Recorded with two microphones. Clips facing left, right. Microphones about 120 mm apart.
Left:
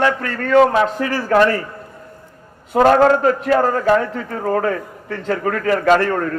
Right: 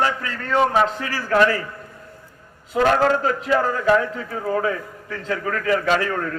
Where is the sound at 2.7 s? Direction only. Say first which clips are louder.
Left 6 dB; 50° left (ahead or behind).